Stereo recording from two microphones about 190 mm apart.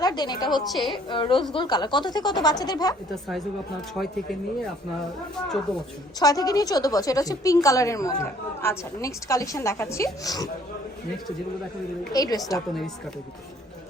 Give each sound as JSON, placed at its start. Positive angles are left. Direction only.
{"t": 0.0, "sound": "a woman's voice", "side_deg": 20}
{"t": 0.7, "sound": "a woman's voice", "side_deg": 0}
{"t": 1.1, "sound": "speech", "side_deg": 25}
{"t": 6.1, "sound": "a woman's voice", "side_deg": 20}
{"t": 12.1, "sound": "speech", "side_deg": 20}
{"t": 12.5, "sound": "a woman's voice", "side_deg": 0}